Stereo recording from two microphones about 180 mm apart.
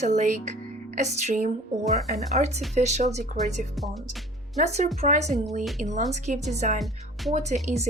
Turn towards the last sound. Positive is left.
turn(degrees=-40)  # may be behind; listen again after turning